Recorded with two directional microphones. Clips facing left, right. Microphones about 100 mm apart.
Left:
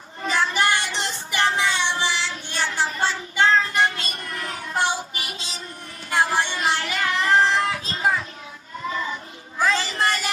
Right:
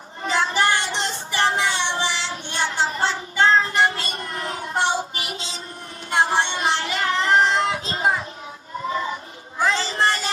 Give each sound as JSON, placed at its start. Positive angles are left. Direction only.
{"t": 0.3, "sound": "child singing", "side_deg": -20}
{"t": 4.0, "sound": "music", "side_deg": -25}
{"t": 6.0, "sound": "child singing", "side_deg": -25}
{"t": 9.6, "sound": "a sound", "side_deg": -25}